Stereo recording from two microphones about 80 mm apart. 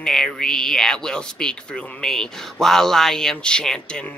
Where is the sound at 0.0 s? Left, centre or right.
Centre.